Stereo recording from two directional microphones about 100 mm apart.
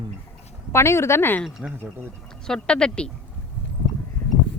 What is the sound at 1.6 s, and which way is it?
Speech, 10° right (ahead or behind).